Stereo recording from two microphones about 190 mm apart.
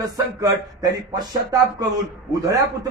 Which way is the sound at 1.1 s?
20° right (ahead or behind).